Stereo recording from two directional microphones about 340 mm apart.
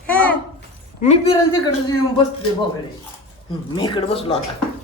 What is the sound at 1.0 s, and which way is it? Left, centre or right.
Speech, centre.